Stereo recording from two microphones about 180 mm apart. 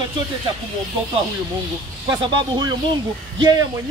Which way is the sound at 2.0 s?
25° right (ahead or behind).